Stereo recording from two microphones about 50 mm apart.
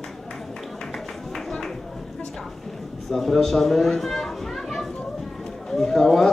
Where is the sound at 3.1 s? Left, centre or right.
Centre.